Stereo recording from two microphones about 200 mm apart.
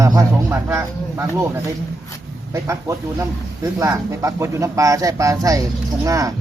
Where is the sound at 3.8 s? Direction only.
15° right (ahead or behind).